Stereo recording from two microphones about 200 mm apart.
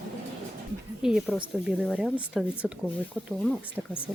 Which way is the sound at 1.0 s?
5° right (ahead or behind).